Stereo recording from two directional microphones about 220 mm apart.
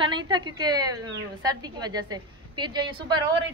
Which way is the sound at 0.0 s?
20° right (ahead or behind).